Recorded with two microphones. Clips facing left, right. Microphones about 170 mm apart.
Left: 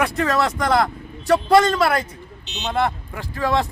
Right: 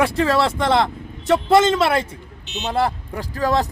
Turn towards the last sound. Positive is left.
turn(degrees=-40)  # may be behind; listen again after turning